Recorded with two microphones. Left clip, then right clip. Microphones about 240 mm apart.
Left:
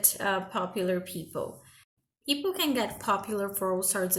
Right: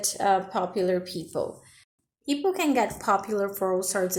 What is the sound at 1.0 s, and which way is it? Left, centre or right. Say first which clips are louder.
Speech: right 5 dB; centre.